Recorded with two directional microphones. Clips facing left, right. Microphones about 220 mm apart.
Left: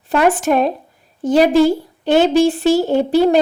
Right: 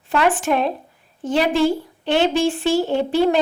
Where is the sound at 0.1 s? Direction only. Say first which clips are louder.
Left 4 dB; 40° left (ahead or behind).